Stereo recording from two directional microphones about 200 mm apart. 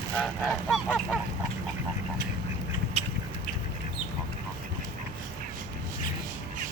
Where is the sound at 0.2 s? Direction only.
5° left (ahead or behind).